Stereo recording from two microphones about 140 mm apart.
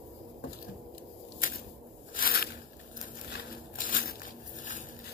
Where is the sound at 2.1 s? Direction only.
90° left.